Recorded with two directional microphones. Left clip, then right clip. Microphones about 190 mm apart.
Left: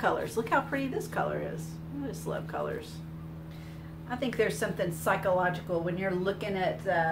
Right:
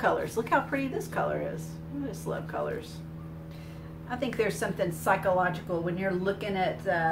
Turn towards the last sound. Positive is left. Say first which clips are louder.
# even
turn(degrees=10)  # may be behind; listen again after turning